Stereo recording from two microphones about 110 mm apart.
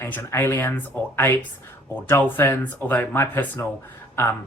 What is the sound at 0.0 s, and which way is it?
Speech, 25° left (ahead or behind).